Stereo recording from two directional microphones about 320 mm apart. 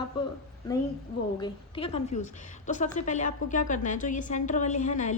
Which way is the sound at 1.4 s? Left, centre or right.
Centre.